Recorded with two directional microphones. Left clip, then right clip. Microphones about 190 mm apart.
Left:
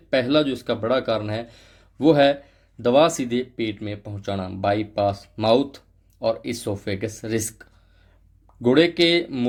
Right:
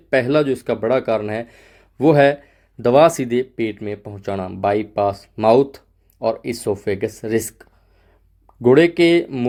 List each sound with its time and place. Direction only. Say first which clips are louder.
0.1 s speech: right 4 dB; 40° right (ahead or behind)